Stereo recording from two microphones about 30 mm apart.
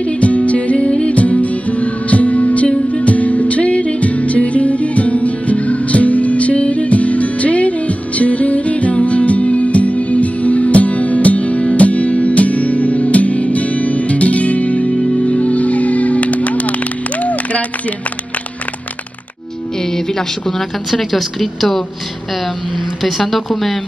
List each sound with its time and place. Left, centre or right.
0.0 s music: left
19.8 s a sound: centre
20.9 s a woman's voice: centre
23.0 s a woman's voice: centre